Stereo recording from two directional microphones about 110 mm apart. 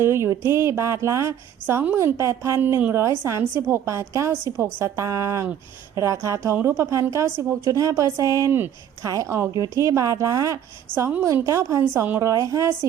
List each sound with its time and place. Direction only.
0.0 s a woman's voice: 25° right (ahead or behind)